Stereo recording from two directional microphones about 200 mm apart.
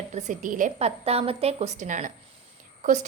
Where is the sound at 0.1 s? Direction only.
35° right (ahead or behind).